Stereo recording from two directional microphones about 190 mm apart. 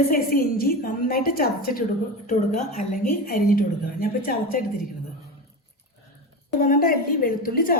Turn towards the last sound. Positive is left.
turn(degrees=50)  # may be behind; listen again after turning